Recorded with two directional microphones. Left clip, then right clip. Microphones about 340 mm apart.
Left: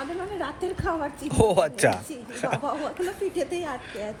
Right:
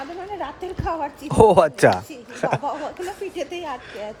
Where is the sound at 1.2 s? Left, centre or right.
Right.